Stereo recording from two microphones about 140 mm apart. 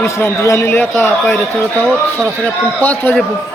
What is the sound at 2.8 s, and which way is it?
Speech, 10° left (ahead or behind).